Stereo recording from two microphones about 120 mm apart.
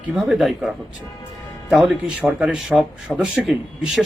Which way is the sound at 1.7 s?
10° right (ahead or behind).